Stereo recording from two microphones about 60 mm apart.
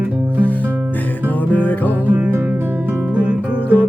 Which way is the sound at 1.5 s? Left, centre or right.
Left.